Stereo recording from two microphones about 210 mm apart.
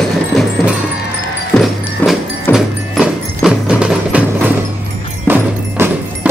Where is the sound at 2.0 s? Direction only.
10° left (ahead or behind).